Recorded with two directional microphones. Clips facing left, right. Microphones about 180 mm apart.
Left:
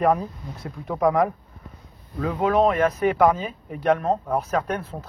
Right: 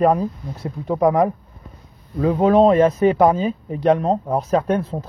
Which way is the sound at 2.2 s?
25° right (ahead or behind).